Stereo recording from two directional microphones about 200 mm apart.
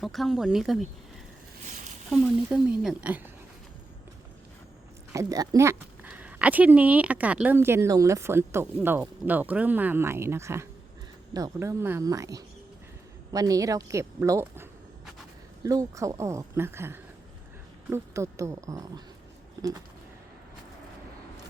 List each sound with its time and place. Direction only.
0.0 s speech: centre (ahead or behind)
2.5 s speech: 5° right (ahead or behind)
5.1 s speech: 15° right (ahead or behind)